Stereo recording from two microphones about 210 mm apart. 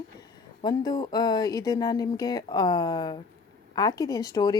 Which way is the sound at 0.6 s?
20° left (ahead or behind).